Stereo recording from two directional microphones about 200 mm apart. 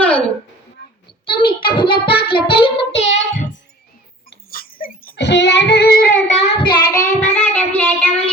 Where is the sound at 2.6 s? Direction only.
30° left (ahead or behind).